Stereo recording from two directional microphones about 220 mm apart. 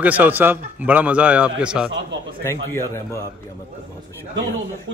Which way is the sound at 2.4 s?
15° left (ahead or behind).